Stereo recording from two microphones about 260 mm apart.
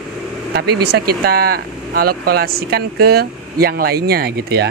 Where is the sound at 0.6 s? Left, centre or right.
Right.